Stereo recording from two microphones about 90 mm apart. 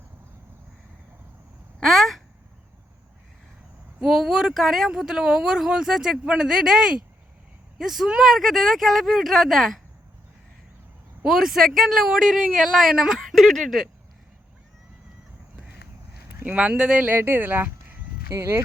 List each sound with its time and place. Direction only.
1.8 s speech: centre (ahead or behind)
4.0 s speech: 5° right (ahead or behind)
11.2 s speech: 5° right (ahead or behind)
16.4 s speech: 15° right (ahead or behind)
17.2 s a sound: 25° right (ahead or behind)
18.3 s speech: 30° right (ahead or behind)